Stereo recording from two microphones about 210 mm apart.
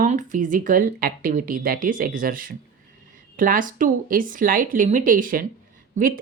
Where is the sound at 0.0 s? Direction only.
35° right (ahead or behind).